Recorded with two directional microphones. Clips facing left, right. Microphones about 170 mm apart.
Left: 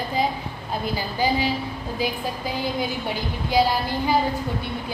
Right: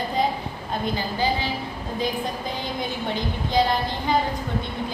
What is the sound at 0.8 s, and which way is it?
Speech, 10° left (ahead or behind).